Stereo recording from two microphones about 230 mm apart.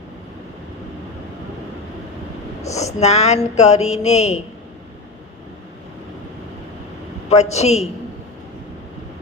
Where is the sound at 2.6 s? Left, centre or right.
Left.